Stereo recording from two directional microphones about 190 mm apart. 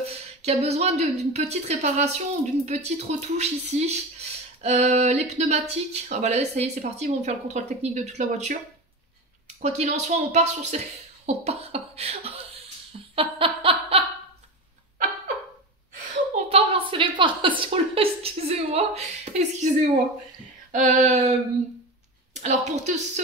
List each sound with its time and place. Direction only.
0.4 s speech: 35° right (ahead or behind)
4.6 s a sound: 35° right (ahead or behind)
4.9 s speech: 35° right (ahead or behind)
9.6 s speech: 35° right (ahead or behind)
13.1 s laughter: 30° right (ahead or behind)
16.4 s a sound: 30° right (ahead or behind)
20.7 s a woman's voice: 40° right (ahead or behind)